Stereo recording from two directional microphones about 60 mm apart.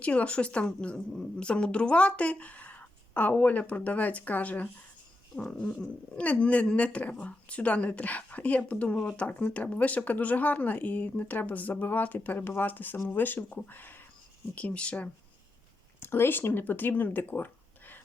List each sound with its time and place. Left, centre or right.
0.0 s speech: left
5.4 s speech: centre; by 14.0 s left
14.5 s speech: left
16.0 s speech: left